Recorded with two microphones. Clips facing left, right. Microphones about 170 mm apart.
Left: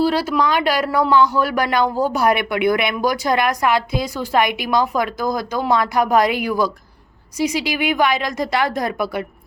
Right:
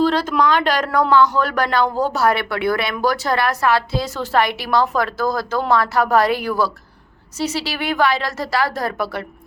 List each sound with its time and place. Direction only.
0.0 s speech: 10° left (ahead or behind)